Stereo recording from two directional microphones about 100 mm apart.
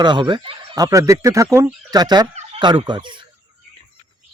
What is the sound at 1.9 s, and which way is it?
Speech, 45° right (ahead or behind).